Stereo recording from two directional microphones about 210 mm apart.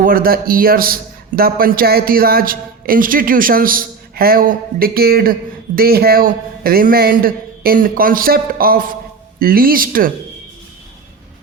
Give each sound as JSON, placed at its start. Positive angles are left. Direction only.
{"t": 0.0, "sound": "a man's voice", "side_deg": -45}